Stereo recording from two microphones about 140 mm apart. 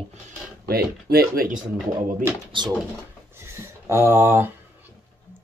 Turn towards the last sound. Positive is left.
turn(degrees=-15)  # may be behind; listen again after turning